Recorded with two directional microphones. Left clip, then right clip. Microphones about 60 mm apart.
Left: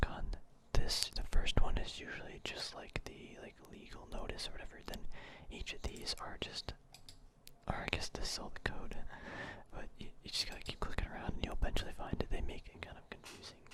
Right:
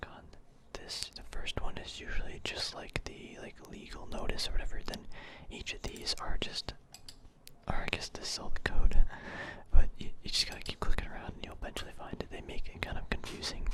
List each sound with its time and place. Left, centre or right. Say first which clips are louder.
0.0 s whispering: left 5 dB; left
0.7 s whispering: left 3 dB; left; by 11.3 s centre
11.3 s whispering: left 1 dB; left
12.7 s whispering: right 10 dB; centre
13.5 s speech: right 14 dB; right